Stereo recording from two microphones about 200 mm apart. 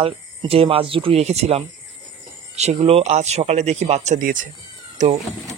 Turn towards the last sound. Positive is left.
turn(degrees=-35)  # may be behind; listen again after turning